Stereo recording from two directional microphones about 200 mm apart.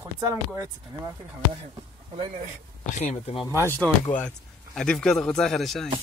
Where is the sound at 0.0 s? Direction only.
15° right (ahead or behind).